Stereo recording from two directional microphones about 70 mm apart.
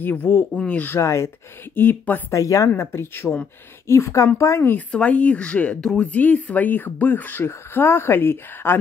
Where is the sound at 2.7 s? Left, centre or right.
Left.